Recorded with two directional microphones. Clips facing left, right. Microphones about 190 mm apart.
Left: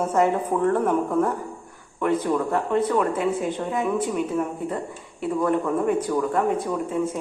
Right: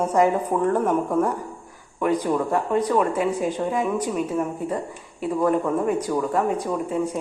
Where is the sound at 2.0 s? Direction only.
15° right (ahead or behind).